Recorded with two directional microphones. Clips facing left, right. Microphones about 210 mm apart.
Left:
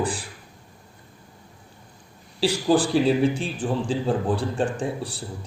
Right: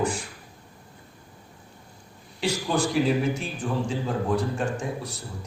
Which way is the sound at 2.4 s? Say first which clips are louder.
Left 5 dB; 30° left (ahead or behind).